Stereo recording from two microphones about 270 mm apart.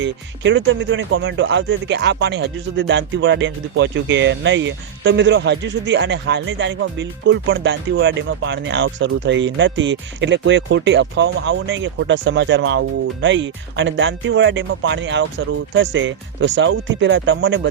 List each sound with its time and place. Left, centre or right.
0.0 s speech: right